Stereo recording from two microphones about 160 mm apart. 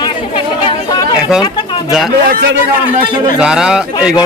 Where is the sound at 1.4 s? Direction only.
30° left (ahead or behind).